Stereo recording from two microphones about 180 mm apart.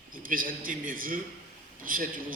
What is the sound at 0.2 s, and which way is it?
A man's voice, 50° right (ahead or behind).